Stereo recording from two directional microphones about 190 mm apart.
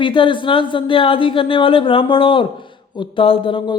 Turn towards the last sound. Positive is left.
turn(degrees=25)  # may be behind; listen again after turning